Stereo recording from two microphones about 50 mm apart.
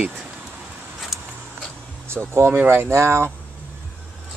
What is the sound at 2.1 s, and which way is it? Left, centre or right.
Speech, right.